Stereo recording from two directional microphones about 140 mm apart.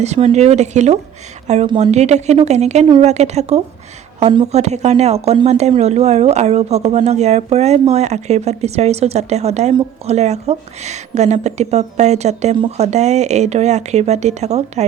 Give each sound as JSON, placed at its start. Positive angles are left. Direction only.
{"t": 0.0, "sound": "speech", "side_deg": -50}